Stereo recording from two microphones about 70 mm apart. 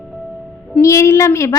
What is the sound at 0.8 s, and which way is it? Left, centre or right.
Speech, left.